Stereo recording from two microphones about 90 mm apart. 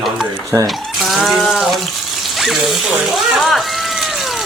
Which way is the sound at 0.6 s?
Centre (ahead or behind).